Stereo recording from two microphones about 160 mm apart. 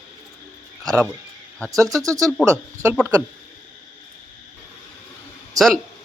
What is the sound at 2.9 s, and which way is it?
Speech, 10° right (ahead or behind).